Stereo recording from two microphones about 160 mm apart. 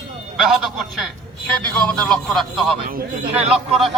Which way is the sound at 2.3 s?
Centre (ahead or behind).